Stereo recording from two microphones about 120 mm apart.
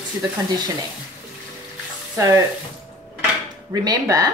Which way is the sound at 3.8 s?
30° right (ahead or behind).